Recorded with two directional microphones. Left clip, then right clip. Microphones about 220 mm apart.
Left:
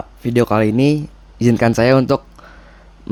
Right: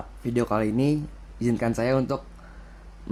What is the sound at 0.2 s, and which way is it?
Speech, 35° left (ahead or behind).